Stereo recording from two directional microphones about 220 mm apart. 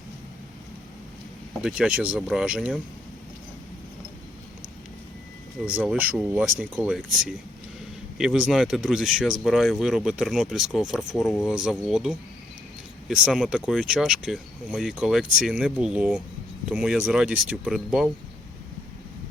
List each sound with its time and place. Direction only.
1.6 s speech: 5° right (ahead or behind)
5.6 s speech: 5° right (ahead or behind)